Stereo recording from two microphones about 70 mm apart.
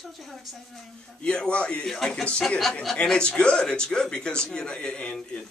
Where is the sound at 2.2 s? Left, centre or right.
Centre.